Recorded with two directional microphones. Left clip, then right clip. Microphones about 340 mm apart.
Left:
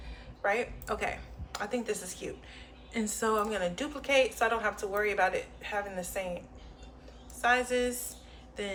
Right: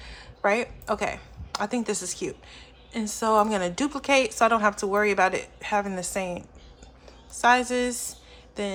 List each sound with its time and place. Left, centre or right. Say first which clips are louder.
0.0 s a woman's voice: right 7 dB; right
7.4 s a woman's voice: right 6 dB; centre